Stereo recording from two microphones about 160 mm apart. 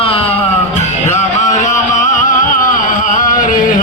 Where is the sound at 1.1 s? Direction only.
50° left (ahead or behind).